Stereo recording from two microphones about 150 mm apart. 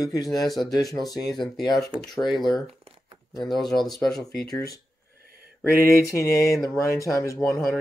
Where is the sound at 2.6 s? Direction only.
40° right (ahead or behind).